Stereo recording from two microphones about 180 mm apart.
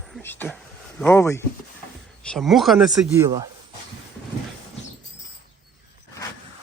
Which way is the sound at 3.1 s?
15° right (ahead or behind).